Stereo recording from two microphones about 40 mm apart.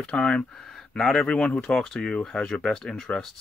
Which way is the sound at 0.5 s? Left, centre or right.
Centre.